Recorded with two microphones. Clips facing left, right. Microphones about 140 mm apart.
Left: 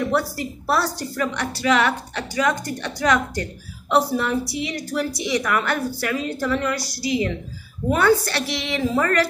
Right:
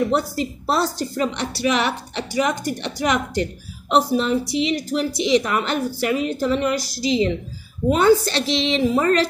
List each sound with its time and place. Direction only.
0.1 s a woman's voice: 20° right (ahead or behind)